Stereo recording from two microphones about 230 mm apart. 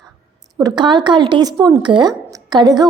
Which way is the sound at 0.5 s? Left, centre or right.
Centre.